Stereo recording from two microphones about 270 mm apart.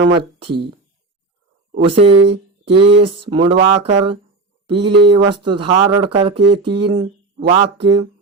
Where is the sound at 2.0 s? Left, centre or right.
Centre.